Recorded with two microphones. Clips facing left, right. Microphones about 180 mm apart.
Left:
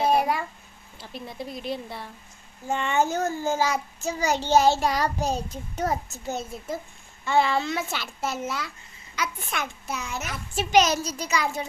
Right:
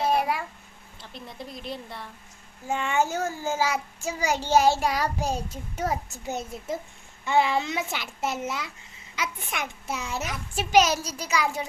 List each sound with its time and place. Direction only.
0.1 s a sound: centre (ahead or behind)
1.1 s a woman's voice: 5° left (ahead or behind)
2.6 s a child's voice: 5° right (ahead or behind); by 10.2 s 30° right (ahead or behind)
10.2 s a child's voice: 10° right (ahead or behind)